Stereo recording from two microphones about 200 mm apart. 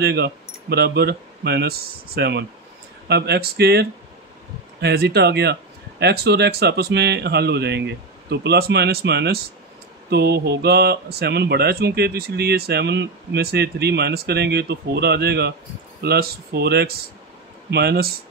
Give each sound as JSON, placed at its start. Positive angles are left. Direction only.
{"t": 0.0, "sound": "speech", "side_deg": -55}